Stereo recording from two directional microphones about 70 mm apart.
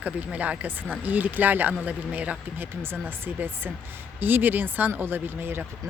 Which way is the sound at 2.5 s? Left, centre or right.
Right.